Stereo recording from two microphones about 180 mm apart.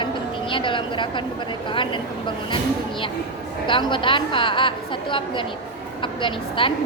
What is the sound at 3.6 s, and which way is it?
A woman's voice, 25° left (ahead or behind).